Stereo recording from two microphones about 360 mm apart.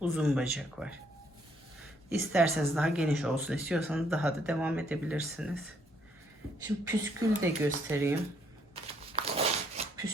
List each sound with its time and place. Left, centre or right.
0.0 s speech: centre
2.0 s speech: centre
6.8 s speech: centre
8.7 s a sound: centre